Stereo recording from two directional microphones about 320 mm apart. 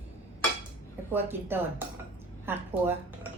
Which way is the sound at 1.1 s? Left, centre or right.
Centre.